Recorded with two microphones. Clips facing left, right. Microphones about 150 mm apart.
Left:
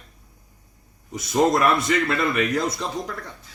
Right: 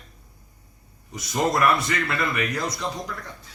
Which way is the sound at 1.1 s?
25° left (ahead or behind).